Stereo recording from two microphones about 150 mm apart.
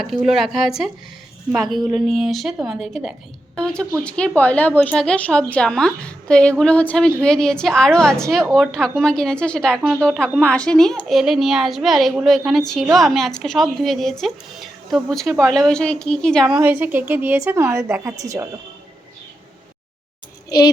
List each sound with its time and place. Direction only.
0.0 s a woman's voice: centre (ahead or behind)
16.6 s a woman's voice: 10° right (ahead or behind)